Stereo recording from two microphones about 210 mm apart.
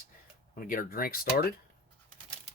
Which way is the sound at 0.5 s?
40° left (ahead or behind).